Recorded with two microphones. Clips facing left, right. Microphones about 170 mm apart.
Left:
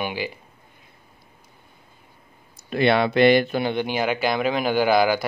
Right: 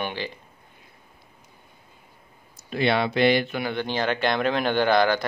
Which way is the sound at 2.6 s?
55° left (ahead or behind).